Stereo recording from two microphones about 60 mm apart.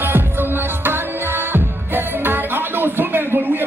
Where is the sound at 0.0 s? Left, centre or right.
Right.